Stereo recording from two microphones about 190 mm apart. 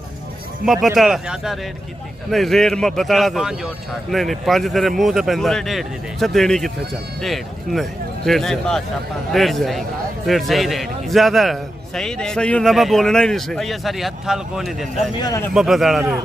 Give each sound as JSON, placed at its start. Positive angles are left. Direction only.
{"t": 0.7, "sound": "a man's voice", "side_deg": 0}
{"t": 15.1, "sound": "a man's voice", "side_deg": 20}
{"t": 15.5, "sound": "a man's voice", "side_deg": 0}